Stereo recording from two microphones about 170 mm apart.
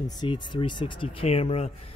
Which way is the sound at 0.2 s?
30° left (ahead or behind).